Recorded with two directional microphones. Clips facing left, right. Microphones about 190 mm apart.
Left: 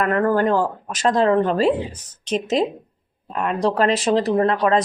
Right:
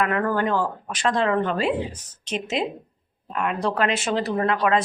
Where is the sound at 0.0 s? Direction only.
35° left (ahead or behind).